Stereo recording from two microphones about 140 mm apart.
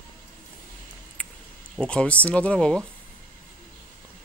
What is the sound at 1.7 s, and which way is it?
Speech, 5° left (ahead or behind).